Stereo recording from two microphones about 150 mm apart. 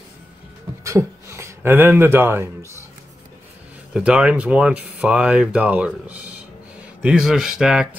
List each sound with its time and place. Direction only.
0.8 s speech: 20° right (ahead or behind)
3.9 s speech: 5° right (ahead or behind)